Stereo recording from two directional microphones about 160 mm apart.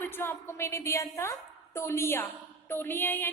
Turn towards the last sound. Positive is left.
turn(degrees=15)  # may be behind; listen again after turning